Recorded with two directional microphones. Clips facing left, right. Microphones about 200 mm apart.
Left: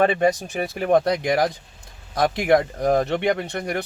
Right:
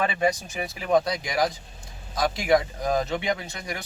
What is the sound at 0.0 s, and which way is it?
Speech, 60° left (ahead or behind).